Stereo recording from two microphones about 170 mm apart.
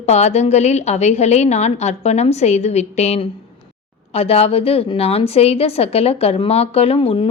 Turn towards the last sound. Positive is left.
turn(degrees=35)  # may be behind; listen again after turning